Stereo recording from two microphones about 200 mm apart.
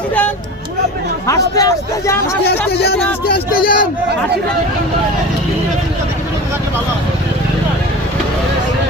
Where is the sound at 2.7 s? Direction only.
55° left (ahead or behind).